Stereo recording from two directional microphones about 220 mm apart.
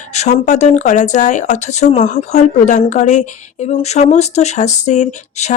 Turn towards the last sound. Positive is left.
turn(degrees=30)  # may be behind; listen again after turning